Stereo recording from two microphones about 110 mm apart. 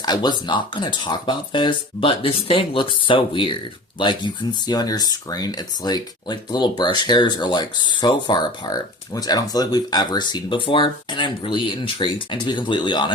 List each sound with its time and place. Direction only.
0.0 s speech: 40° left (ahead or behind)